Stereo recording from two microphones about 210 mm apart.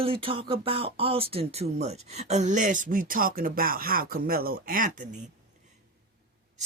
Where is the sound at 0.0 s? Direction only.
25° right (ahead or behind).